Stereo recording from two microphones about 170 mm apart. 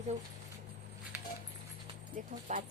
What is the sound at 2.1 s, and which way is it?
Speech, 50° right (ahead or behind).